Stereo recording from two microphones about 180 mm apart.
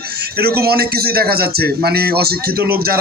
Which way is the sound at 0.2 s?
60° right (ahead or behind).